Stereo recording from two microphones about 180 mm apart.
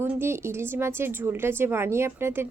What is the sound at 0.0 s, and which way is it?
A woman's voice, 15° right (ahead or behind).